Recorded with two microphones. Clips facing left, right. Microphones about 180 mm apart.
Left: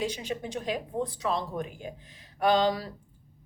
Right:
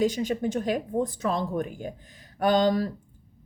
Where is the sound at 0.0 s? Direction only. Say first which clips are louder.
Right 7 dB; 45° right (ahead or behind).